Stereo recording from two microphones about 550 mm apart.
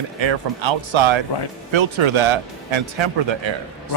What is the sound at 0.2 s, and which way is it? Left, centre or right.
Speech, right.